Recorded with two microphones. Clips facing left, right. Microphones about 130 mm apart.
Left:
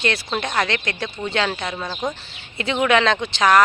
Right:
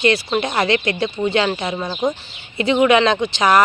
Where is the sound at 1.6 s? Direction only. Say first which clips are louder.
Right 4 dB; 15° right (ahead or behind).